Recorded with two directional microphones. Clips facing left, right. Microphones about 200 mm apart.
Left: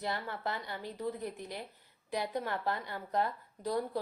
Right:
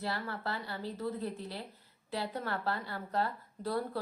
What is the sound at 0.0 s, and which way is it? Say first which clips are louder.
A woman's voice: even; 20° left (ahead or behind).